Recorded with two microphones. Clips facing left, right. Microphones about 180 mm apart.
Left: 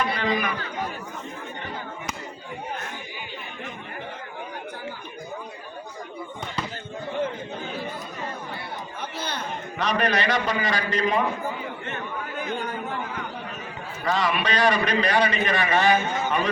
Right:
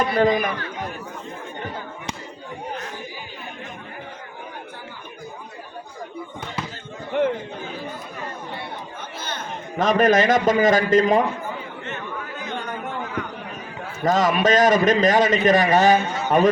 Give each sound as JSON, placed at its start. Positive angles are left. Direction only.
{"t": 0.0, "sound": "a man's voice", "side_deg": -45}
{"t": 7.1, "sound": "chatter", "side_deg": -70}
{"t": 9.7, "sound": "a man's voice", "side_deg": -45}
{"t": 14.0, "sound": "a man's voice", "side_deg": -45}